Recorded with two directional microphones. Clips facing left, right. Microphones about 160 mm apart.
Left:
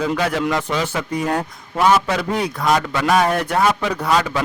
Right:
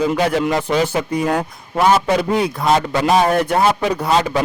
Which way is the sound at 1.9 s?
25° right (ahead or behind).